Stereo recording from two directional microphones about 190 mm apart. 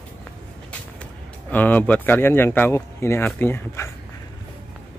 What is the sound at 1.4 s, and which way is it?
Speech, 10° left (ahead or behind).